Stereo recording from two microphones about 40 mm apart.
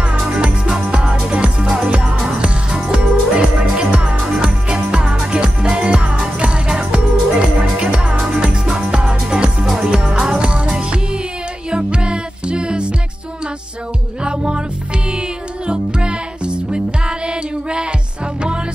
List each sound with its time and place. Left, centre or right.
0.8 s music: right
11.7 s music: right
14.2 s music: right